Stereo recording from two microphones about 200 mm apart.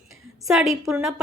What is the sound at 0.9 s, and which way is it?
Speech, 5° right (ahead or behind).